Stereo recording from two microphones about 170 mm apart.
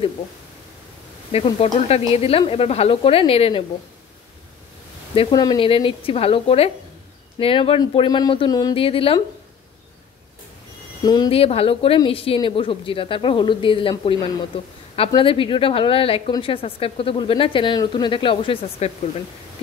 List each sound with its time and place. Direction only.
1.3 s a woman's voice: 35° left (ahead or behind)
5.1 s a woman's voice: 30° left (ahead or behind)
8.7 s a woman's voice: 35° left (ahead or behind)
11.1 s a woman's voice: 30° left (ahead or behind)